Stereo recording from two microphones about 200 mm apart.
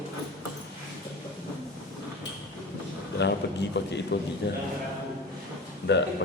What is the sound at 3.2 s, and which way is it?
A man's voice, 60° left (ahead or behind).